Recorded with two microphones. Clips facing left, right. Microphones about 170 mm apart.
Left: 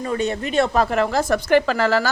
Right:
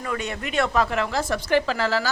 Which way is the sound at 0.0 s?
30° left (ahead or behind).